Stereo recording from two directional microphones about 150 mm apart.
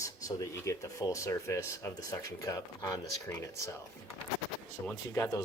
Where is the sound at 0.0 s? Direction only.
20° left (ahead or behind).